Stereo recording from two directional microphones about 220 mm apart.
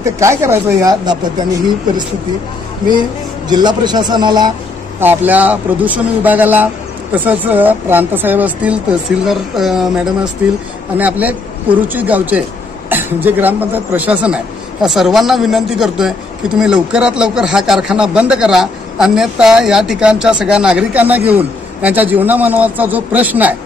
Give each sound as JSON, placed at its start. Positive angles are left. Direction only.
{"t": 0.0, "sound": "speech", "side_deg": -15}
{"t": 3.4, "sound": "a man's voice", "side_deg": -20}
{"t": 5.0, "sound": "speech", "side_deg": -5}